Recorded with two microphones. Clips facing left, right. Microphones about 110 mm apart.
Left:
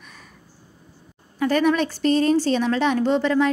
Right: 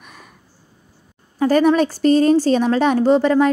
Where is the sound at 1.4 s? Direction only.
35° right (ahead or behind).